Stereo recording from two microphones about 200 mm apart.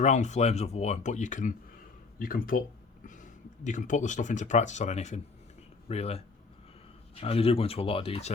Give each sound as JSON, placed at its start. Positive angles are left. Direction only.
{"t": 0.0, "sound": "speech", "side_deg": 35}